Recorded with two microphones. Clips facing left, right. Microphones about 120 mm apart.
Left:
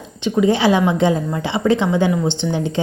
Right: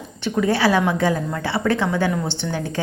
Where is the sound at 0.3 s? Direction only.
20° left (ahead or behind).